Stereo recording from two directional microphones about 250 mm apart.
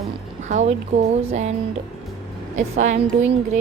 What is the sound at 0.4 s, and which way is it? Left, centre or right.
A woman's voice, right.